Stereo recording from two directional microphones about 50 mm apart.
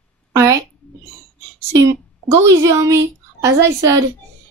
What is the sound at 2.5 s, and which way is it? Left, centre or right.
Speech, right.